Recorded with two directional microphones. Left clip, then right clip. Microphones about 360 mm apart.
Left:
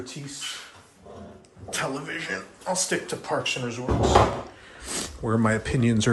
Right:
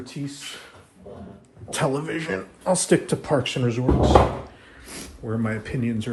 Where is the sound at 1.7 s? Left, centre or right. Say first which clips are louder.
Right 5 dB; centre.